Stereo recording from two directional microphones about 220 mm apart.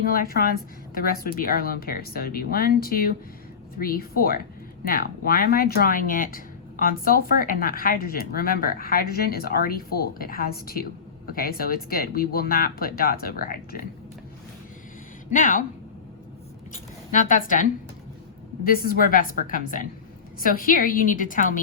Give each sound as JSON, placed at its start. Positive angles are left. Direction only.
{"t": 0.0, "sound": "speech", "side_deg": 40}
{"t": 15.3, "sound": "speech", "side_deg": 35}
{"t": 17.1, "sound": "speech", "side_deg": 35}